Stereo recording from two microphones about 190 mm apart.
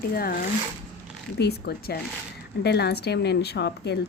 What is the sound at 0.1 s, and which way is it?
Speech, 50° left (ahead or behind).